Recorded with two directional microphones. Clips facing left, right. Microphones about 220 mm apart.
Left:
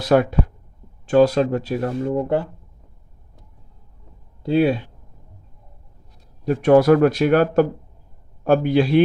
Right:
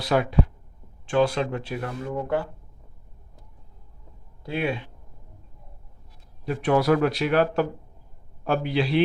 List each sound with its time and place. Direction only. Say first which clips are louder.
0.0 s speech: left 6 dB; 45° left (ahead or behind); by 2.5 s 30° left (ahead or behind)
4.4 s speech: left 10 dB; 35° left (ahead or behind)
6.4 s speech: left 8 dB; 45° left (ahead or behind)